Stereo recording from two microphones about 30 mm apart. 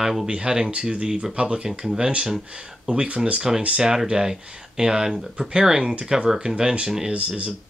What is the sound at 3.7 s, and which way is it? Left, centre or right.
Speech, right.